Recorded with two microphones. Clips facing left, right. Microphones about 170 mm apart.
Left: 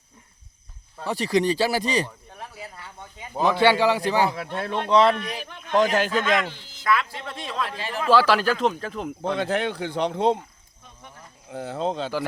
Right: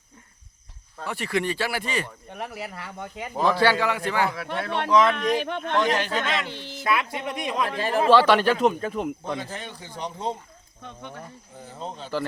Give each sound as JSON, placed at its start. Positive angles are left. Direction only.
{"t": 1.0, "sound": "speech", "side_deg": 35}
{"t": 2.3, "sound": "speech", "side_deg": -80}
{"t": 3.4, "sound": "a man's voice", "side_deg": 20}
{"t": 5.1, "sound": "a man's voice", "side_deg": -80}
{"t": 5.7, "sound": "a man's voice", "side_deg": 45}
{"t": 6.8, "sound": "speech", "side_deg": -20}
{"t": 7.7, "sound": "speech", "side_deg": -50}
{"t": 8.1, "sound": "speech", "side_deg": 5}
{"t": 9.2, "sound": "a man's voice", "side_deg": 70}
{"t": 10.8, "sound": "a man's voice", "side_deg": -75}
{"t": 11.5, "sound": "speech", "side_deg": 80}